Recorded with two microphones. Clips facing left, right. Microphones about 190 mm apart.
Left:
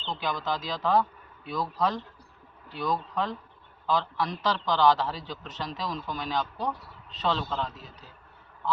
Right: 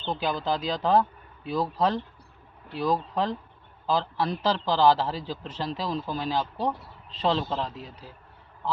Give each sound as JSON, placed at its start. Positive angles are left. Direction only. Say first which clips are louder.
{"t": 0.2, "sound": "a man's voice", "louder": "right 2 dB", "side_deg": -30}